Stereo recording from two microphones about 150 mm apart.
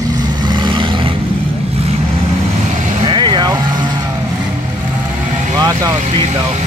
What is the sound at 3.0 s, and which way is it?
Vehicle, 30° right (ahead or behind).